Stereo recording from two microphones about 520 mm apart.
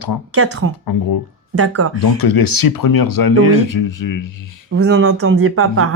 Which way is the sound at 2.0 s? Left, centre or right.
Left.